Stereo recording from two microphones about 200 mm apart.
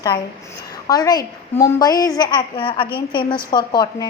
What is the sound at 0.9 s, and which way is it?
A child's voice, 20° left (ahead or behind).